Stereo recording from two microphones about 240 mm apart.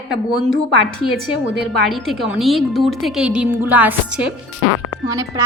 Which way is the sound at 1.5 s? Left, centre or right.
Right.